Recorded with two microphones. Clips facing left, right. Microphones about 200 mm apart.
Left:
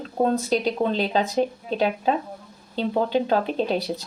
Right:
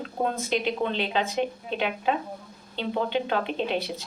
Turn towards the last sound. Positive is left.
turn(degrees=35)  # may be behind; listen again after turning